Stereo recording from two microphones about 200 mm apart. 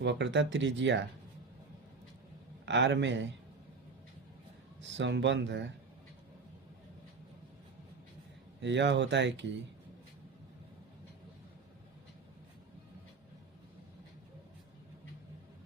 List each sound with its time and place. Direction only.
0.0 s speech: 60° right (ahead or behind)
2.6 s speech: 65° right (ahead or behind)
4.8 s speech: 65° right (ahead or behind)
8.6 s speech: 60° right (ahead or behind)